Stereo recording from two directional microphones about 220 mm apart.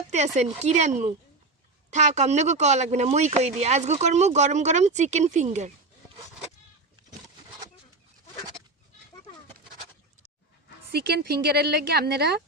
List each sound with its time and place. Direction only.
0.1 s speech: 30° right (ahead or behind)
10.9 s a woman's voice: 45° right (ahead or behind)